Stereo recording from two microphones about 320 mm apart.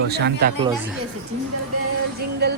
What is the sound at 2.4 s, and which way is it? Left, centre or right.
Speech, right.